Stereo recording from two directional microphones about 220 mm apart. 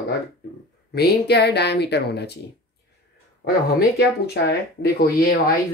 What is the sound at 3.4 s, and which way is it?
Speech, 45° left (ahead or behind).